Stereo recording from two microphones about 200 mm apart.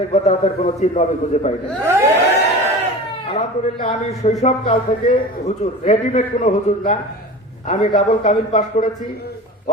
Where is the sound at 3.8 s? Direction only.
35° left (ahead or behind).